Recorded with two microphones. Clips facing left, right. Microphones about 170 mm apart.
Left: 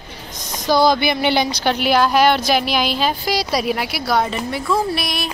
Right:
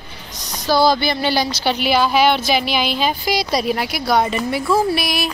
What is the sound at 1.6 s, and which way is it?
A woman's voice, 5° right (ahead or behind).